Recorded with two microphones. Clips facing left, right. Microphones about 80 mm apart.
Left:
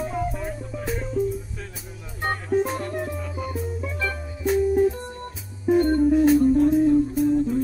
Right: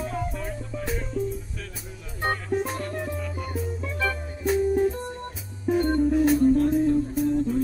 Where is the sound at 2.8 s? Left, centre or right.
Centre.